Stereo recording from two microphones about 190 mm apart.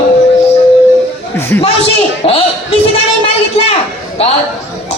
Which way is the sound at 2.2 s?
30° left (ahead or behind).